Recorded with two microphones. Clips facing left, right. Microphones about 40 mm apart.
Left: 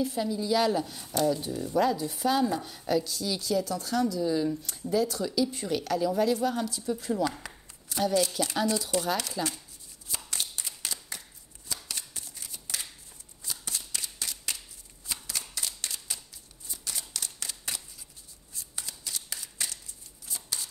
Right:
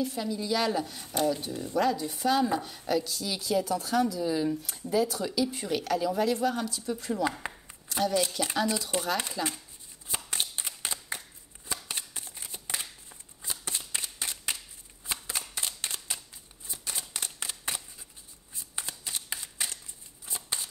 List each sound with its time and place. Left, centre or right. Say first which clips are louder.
0.0 s a woman's voice: left 2 dB; centre
3.3 s a woman's voice: even; centre
7.9 s a sound: even; centre
8.4 s a woman's voice: left 1 dB; centre
9.1 s speech: even; right
10.0 s a sound: right 2 dB; right
13.4 s shuffling cards: right 1 dB; right
15.0 s a sound: right 2 dB; right
16.6 s scissors: right 1 dB; right
18.5 s shuffling cards: right 2 dB; right